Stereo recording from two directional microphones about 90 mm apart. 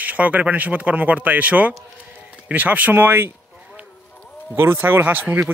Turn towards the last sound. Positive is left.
turn(degrees=-20)  # may be behind; listen again after turning